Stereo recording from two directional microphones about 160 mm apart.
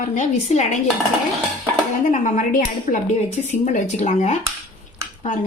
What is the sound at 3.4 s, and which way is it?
Speech, 45° left (ahead or behind).